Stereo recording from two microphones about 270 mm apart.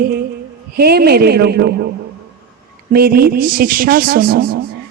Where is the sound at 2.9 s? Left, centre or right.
Right.